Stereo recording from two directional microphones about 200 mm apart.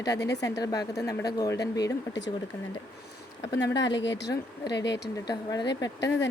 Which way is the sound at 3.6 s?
60° left (ahead or behind).